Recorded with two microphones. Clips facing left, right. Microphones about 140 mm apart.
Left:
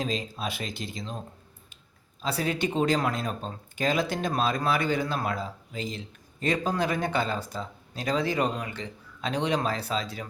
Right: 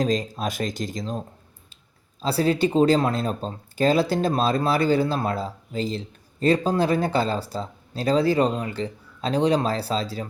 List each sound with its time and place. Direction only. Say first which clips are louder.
0.0 s speech: right 7 dB; 45° right (ahead or behind)
2.2 s speech: right 7 dB; 35° right (ahead or behind)